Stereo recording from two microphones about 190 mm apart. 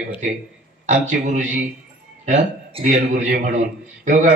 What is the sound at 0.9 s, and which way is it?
A man's voice, 40° right (ahead or behind).